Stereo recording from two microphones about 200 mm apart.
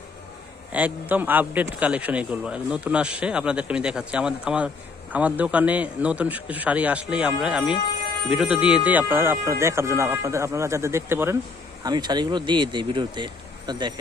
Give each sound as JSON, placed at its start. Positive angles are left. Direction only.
{"t": 0.7, "sound": "a man's voice", "side_deg": -5}